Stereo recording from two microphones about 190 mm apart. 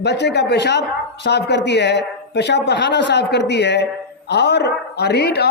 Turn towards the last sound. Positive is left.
turn(degrees=60)  # may be behind; listen again after turning